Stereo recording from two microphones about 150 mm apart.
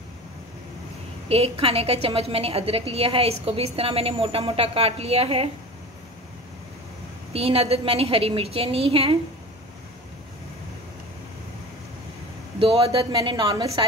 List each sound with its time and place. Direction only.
1.3 s a woman's voice: 40° right (ahead or behind)
7.3 s a woman's voice: 40° right (ahead or behind)
12.8 s a woman's voice: 30° right (ahead or behind)